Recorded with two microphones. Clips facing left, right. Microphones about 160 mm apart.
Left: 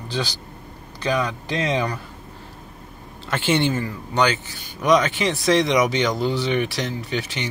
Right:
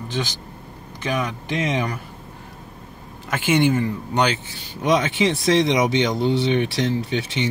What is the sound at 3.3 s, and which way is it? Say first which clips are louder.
Speech: right 2 dB; 10° right (ahead or behind).